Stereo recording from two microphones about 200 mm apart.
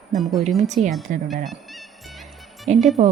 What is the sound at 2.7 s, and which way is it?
Speech, 35° right (ahead or behind).